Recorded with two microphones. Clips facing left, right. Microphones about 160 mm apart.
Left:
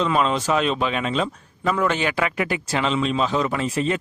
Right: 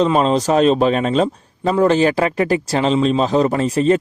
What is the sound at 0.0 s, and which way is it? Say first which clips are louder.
Speech: right 6 dB; 35° right (ahead or behind).